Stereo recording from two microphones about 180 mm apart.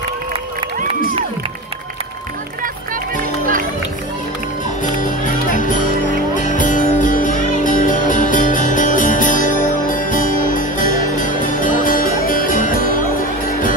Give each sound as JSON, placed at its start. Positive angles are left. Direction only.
{"t": 4.9, "sound": "music", "side_deg": 45}